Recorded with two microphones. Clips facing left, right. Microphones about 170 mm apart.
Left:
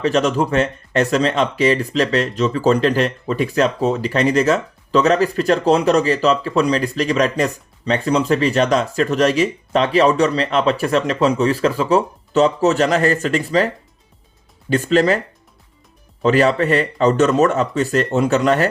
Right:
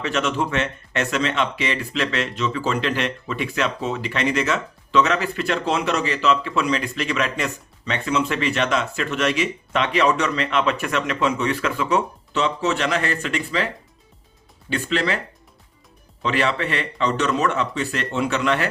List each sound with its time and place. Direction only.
0.0 s speech: 35° left (ahead or behind)
14.7 s speech: 40° left (ahead or behind)
16.2 s speech: 40° left (ahead or behind)